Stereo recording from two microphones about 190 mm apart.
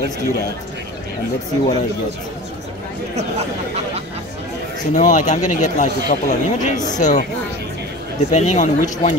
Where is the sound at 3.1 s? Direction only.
35° right (ahead or behind).